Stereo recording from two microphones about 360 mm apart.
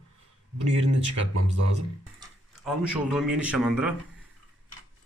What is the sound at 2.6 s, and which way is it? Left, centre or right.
Speech, centre.